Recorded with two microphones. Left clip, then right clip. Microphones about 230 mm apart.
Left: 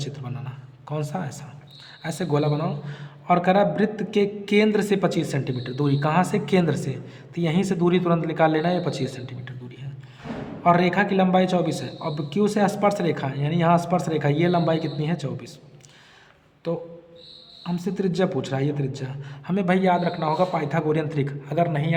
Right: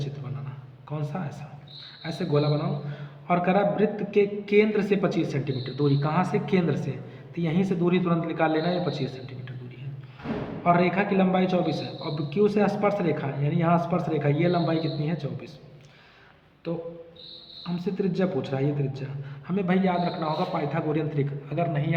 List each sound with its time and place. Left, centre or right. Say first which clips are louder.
0.0 s a sound: left 3 dB; left
2.0 s a man's voice: left 2 dB; left
10.6 s a man's voice: left 3 dB; left
17.6 s a man's voice: left 2 dB; left